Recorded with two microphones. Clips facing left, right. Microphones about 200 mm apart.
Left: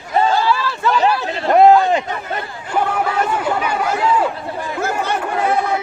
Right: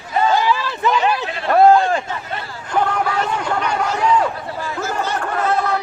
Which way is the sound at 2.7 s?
5° left (ahead or behind).